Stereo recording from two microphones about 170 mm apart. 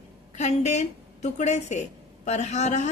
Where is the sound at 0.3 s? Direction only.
45° left (ahead or behind).